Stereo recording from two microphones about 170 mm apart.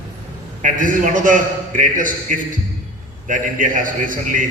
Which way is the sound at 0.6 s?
50° right (ahead or behind).